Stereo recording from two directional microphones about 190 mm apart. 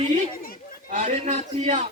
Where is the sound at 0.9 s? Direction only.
35° right (ahead or behind).